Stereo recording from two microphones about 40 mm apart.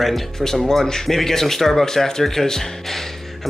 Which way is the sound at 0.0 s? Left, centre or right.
Centre.